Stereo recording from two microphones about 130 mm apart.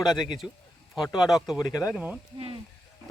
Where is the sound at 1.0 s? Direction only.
30° left (ahead or behind).